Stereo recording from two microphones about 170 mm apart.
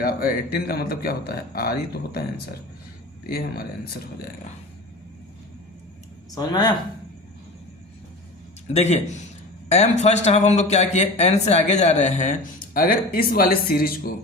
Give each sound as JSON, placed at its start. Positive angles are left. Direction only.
{"t": 0.0, "sound": "speech", "side_deg": 60}
{"t": 6.3, "sound": "speech", "side_deg": 25}
{"t": 8.7, "sound": "speech", "side_deg": 40}
{"t": 12.7, "sound": "speech", "side_deg": 60}